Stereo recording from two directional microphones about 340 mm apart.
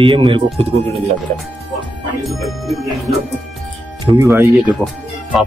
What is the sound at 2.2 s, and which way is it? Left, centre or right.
Music, centre.